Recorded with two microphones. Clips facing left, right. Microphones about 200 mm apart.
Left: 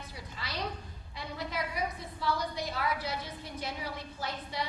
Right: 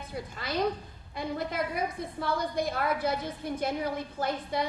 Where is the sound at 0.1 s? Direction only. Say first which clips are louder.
Right 11 dB; 50° right (ahead or behind).